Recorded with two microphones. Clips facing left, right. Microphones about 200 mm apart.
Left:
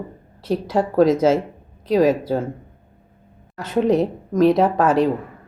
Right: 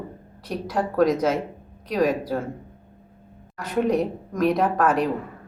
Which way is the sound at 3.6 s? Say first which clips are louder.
Left 4 dB; 25° left (ahead or behind).